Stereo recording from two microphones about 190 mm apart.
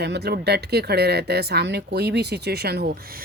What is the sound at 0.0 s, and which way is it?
Speech, 60° right (ahead or behind).